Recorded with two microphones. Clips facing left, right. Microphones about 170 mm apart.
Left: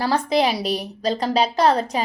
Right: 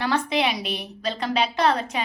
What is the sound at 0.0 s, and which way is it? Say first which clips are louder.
A woman's voice: left 4 dB; 35° left (ahead or behind).